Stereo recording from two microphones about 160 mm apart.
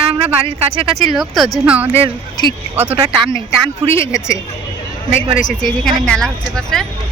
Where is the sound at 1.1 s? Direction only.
Centre (ahead or behind).